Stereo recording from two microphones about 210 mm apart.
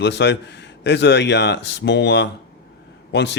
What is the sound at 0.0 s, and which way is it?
Speech, 55° left (ahead or behind).